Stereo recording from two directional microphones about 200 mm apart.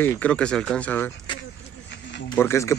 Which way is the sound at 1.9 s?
60° left (ahead or behind).